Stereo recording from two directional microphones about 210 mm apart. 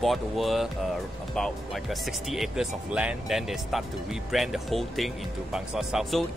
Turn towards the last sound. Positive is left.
turn(degrees=0)  # may be behind; listen again after turning